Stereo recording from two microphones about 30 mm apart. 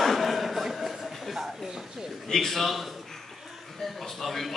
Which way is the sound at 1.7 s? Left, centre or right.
Centre.